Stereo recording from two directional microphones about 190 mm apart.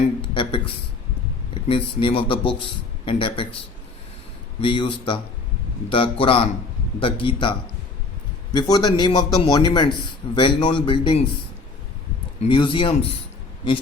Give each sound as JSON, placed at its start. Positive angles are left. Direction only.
{"t": 0.2, "sound": "a man's voice", "side_deg": 25}
{"t": 4.6, "sound": "a man's voice", "side_deg": 25}
{"t": 8.5, "sound": "a man's voice", "side_deg": 20}
{"t": 12.4, "sound": "a man's voice", "side_deg": 25}